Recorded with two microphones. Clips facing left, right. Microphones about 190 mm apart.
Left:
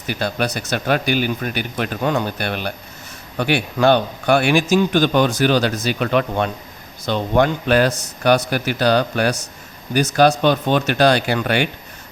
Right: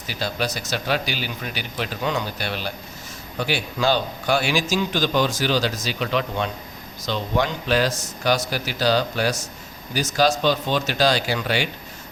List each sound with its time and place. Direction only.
0.1 s a man's voice: 55° left (ahead or behind)